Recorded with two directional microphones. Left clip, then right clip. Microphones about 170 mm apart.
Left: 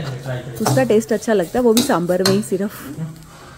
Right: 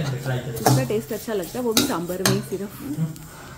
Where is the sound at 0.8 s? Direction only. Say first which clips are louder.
Left 10 dB; 45° left (ahead or behind).